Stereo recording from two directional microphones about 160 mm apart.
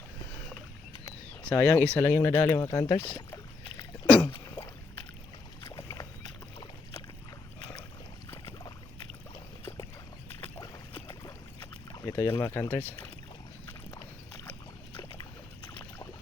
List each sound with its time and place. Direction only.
1.5 s speech: 10° left (ahead or behind)
5.6 s boat: 20° left (ahead or behind)
8.4 s boat: 30° left (ahead or behind)
10.4 s boat: 35° left (ahead or behind)
11.9 s boat: 15° left (ahead or behind)
12.4 s speech: 15° left (ahead or behind)
13.9 s boat: 20° left (ahead or behind)